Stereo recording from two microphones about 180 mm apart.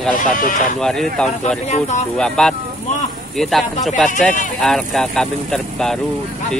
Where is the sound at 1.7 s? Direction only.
40° left (ahead or behind).